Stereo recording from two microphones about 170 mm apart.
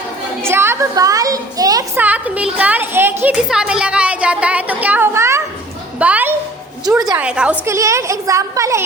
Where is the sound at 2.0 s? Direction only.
10° right (ahead or behind).